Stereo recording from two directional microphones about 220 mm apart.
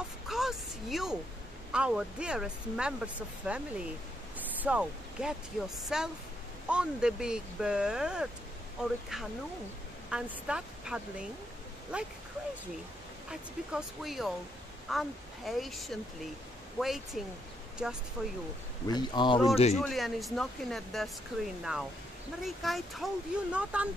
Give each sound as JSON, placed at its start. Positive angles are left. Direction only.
{"t": 0.3, "sound": "a sound", "side_deg": 0}
{"t": 1.7, "sound": "speech", "side_deg": -5}
{"t": 4.6, "sound": "speech", "side_deg": -5}
{"t": 13.3, "sound": "speech", "side_deg": -5}
{"t": 18.9, "sound": "speech", "side_deg": 20}
{"t": 19.7, "sound": "speech", "side_deg": 0}
{"t": 22.4, "sound": "speech", "side_deg": 0}